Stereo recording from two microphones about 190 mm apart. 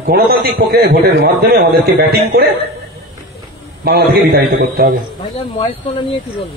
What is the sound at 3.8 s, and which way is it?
A man's voice, 55° right (ahead or behind).